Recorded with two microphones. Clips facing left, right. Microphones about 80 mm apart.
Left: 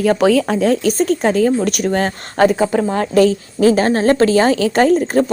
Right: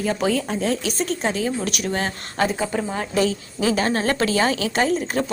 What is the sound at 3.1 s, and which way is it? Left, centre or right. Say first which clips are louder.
A woman's voice: left 9 dB; left.